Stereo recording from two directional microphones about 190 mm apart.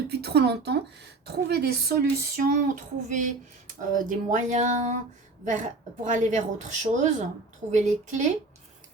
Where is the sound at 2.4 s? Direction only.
40° right (ahead or behind).